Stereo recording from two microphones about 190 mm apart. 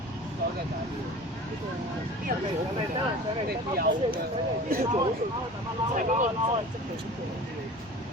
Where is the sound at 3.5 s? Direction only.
50° right (ahead or behind).